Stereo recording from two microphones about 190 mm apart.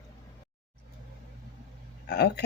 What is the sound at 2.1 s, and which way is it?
Speech, 60° left (ahead or behind).